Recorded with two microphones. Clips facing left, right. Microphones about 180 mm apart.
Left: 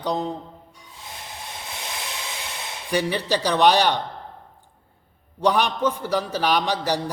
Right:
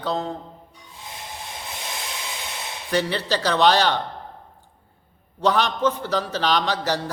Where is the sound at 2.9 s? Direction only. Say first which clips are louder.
Even; 10° left (ahead or behind).